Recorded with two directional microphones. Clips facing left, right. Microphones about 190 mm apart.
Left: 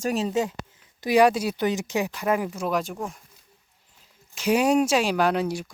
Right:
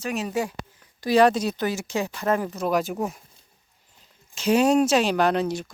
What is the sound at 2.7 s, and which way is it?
Speech, 5° right (ahead or behind).